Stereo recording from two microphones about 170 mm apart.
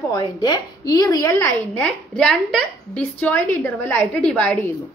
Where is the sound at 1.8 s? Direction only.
5° left (ahead or behind).